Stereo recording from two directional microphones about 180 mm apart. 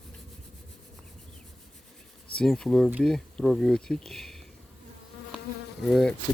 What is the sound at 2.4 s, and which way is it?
Speech, 5° left (ahead or behind).